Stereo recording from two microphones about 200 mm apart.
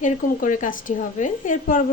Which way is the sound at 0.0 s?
40° left (ahead or behind).